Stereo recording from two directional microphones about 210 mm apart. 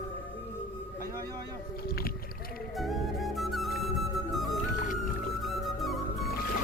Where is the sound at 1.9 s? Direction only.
45° left (ahead or behind).